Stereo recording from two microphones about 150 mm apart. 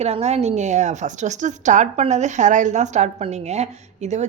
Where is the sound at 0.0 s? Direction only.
45° right (ahead or behind).